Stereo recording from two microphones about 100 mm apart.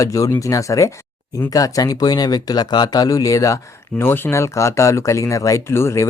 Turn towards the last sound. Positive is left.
turn(degrees=25)  # may be behind; listen again after turning